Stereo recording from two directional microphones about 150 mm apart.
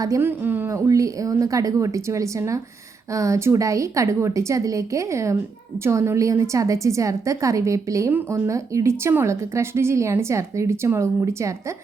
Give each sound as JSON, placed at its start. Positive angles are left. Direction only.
{"t": 0.0, "sound": "a woman's voice", "side_deg": -20}